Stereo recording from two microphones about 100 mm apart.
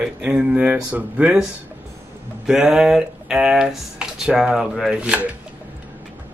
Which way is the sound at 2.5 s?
5° right (ahead or behind).